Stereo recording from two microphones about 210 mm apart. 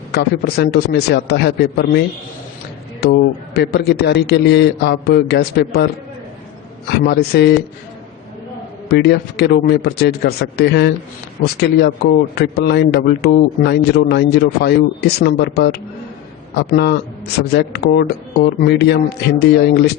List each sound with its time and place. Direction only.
0.1 s a man's voice: 50° left (ahead or behind)
8.9 s a man's voice: 50° left (ahead or behind)
12.4 s a man's voice: 50° left (ahead or behind)